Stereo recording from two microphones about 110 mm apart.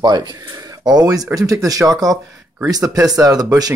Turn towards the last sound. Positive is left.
turn(degrees=-35)  # may be behind; listen again after turning